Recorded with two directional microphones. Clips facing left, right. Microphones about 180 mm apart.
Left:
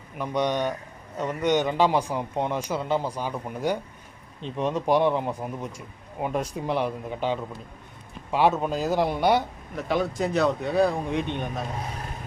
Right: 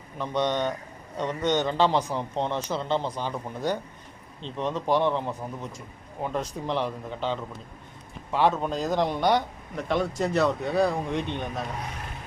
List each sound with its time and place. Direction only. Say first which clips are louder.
0.2 s a man's voice: left 1 dB; 10° left (ahead or behind)